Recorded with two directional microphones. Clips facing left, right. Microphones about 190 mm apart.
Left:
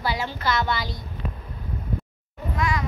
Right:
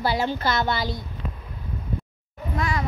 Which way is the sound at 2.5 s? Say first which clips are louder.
Even; 35° right (ahead or behind).